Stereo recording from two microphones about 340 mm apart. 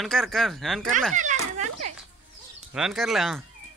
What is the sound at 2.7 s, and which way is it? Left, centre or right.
Speech, centre.